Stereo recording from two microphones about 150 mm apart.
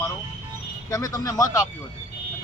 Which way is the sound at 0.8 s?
25° left (ahead or behind).